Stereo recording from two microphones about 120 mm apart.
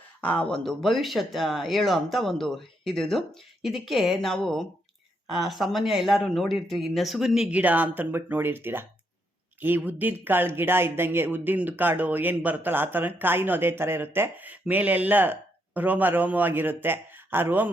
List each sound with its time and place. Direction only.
0.2 s speech: 10° left (ahead or behind); by 17.7 s 15° right (ahead or behind)